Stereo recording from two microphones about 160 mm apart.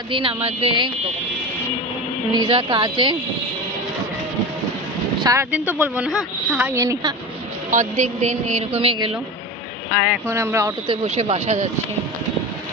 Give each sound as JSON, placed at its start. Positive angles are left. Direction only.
{"t": 0.1, "sound": "speech", "side_deg": -35}
{"t": 2.3, "sound": "speech", "side_deg": -30}
{"t": 5.2, "sound": "a woman's voice", "side_deg": -20}
{"t": 5.5, "sound": "speech", "side_deg": -10}
{"t": 6.7, "sound": "a woman's voice", "side_deg": -20}
{"t": 7.7, "sound": "a woman's voice", "side_deg": -50}
{"t": 10.2, "sound": "speech", "side_deg": -15}
{"t": 10.9, "sound": "speech", "side_deg": -40}